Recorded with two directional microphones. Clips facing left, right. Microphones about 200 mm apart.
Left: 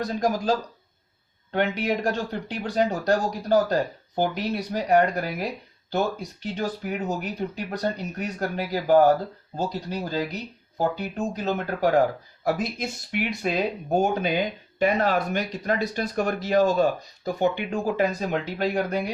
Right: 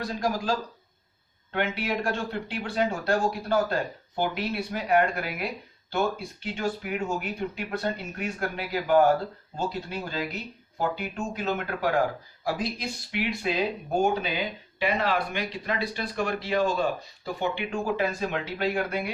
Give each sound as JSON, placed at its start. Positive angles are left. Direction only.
{"t": 0.0, "sound": "speech", "side_deg": 45}
{"t": 1.5, "sound": "speech", "side_deg": 40}